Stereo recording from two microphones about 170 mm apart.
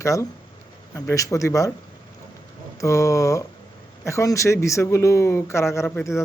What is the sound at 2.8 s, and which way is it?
Speech, 20° left (ahead or behind).